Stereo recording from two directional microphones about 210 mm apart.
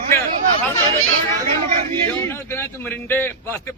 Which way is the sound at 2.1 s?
10° left (ahead or behind).